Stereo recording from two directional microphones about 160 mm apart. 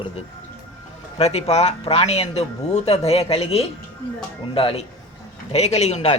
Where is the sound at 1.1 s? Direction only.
40° left (ahead or behind).